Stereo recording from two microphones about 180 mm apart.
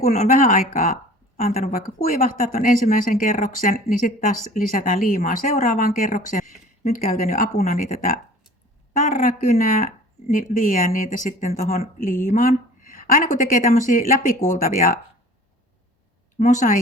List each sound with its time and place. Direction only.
0.0 s speech: 45° left (ahead or behind)
7.5 s speech: 40° left (ahead or behind)
16.4 s speech: 45° left (ahead or behind)